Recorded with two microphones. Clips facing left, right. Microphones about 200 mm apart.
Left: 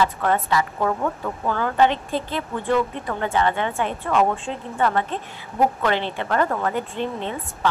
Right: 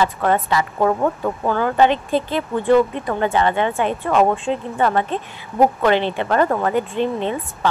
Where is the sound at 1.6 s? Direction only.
20° right (ahead or behind).